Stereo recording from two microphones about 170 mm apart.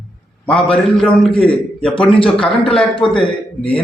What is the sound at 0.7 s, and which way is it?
A man's voice, 5° left (ahead or behind).